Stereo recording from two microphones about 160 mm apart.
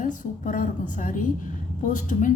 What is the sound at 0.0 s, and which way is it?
A woman's voice, 55° left (ahead or behind).